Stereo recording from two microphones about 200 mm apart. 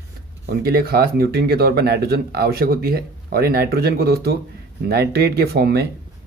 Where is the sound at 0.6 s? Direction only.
50° right (ahead or behind).